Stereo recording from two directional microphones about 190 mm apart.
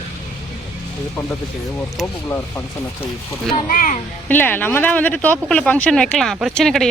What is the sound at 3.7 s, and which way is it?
Speech, 45° left (ahead or behind).